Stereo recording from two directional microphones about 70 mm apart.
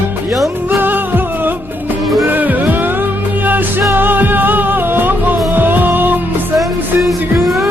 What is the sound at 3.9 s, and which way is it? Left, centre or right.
Music, right.